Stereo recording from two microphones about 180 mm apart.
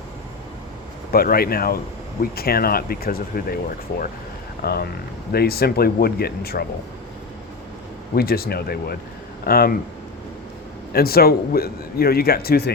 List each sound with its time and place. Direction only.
1.1 s speech: 55° left (ahead or behind)
4.6 s speech: 60° left (ahead or behind)
8.1 s speech: 55° left (ahead or behind)
10.9 s speech: 55° left (ahead or behind)